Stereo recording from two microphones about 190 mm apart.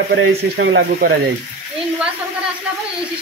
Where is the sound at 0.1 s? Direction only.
65° right (ahead or behind).